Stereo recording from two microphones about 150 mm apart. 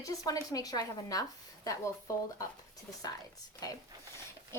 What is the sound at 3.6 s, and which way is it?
Speech, 25° left (ahead or behind).